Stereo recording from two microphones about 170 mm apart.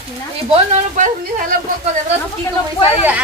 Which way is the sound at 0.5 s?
45° right (ahead or behind).